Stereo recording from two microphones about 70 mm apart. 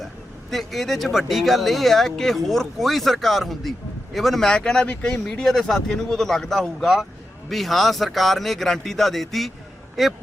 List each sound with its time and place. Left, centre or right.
0.5 s speech: centre